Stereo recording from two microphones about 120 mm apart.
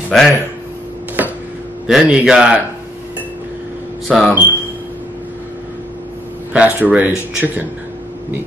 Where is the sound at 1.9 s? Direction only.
5° right (ahead or behind).